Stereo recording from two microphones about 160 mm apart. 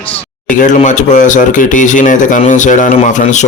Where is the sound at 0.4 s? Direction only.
50° left (ahead or behind).